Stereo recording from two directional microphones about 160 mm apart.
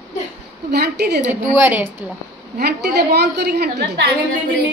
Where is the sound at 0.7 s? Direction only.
90° right.